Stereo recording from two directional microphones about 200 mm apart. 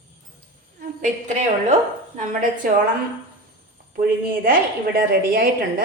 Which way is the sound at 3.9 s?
45° right (ahead or behind).